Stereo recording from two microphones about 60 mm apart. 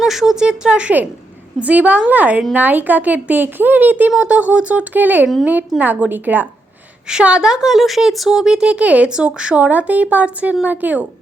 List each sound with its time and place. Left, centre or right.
0.0 s a woman's voice: centre; by 6.5 s right
7.1 s speech: centre